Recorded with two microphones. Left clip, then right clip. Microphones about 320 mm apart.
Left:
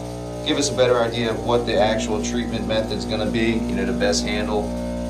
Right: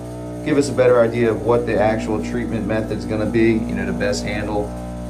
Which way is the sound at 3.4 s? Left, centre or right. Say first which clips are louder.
Right 3 dB; centre.